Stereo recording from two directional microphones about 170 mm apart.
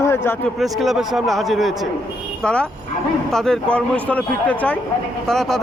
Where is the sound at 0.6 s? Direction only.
Centre (ahead or behind).